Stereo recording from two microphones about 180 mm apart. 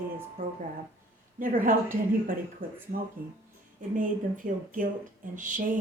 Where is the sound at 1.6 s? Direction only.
50° right (ahead or behind).